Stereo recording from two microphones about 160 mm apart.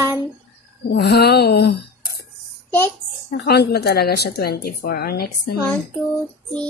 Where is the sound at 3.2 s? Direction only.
80° left.